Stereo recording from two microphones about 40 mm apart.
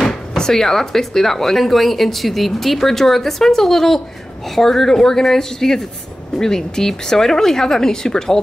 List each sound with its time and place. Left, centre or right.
0.4 s speech: centre